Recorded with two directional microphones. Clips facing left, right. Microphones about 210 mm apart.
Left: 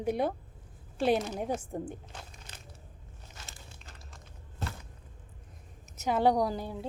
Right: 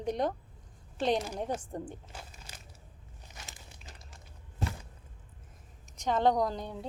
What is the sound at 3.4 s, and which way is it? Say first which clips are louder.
Crumpling: even; 15° right (ahead or behind).